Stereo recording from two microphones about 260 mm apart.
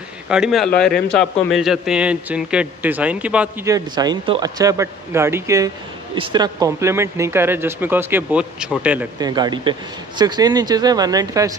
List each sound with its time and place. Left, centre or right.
0.3 s a man's voice: centre